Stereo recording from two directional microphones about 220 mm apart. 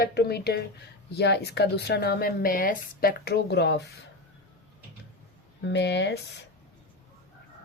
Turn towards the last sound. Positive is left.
turn(degrees=50)  # may be behind; listen again after turning